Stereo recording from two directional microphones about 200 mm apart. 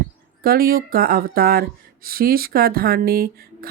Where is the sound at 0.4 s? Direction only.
50° right (ahead or behind).